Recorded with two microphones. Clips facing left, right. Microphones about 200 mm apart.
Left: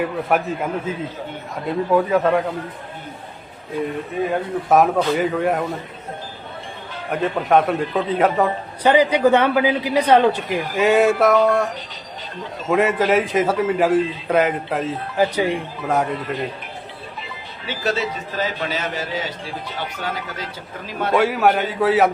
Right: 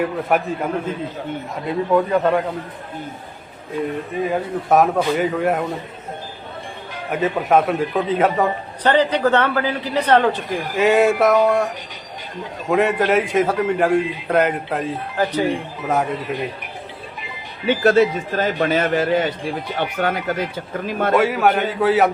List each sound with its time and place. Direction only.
0.0 s a man's voice: centre (ahead or behind)
1.6 s a man's voice: centre (ahead or behind)
4.1 s a man's voice: centre (ahead or behind)
7.1 s a man's voice: 5° right (ahead or behind)
8.9 s speech: 10° left (ahead or behind)
10.8 s a man's voice: centre (ahead or behind)
12.7 s a man's voice: centre (ahead or behind)
15.2 s speech: 15° left (ahead or behind)
15.9 s a man's voice: centre (ahead or behind)
17.7 s a man's voice: 55° right (ahead or behind)
21.1 s a man's voice: centre (ahead or behind)